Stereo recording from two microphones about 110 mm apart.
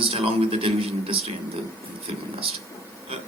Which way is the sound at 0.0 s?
60° right (ahead or behind).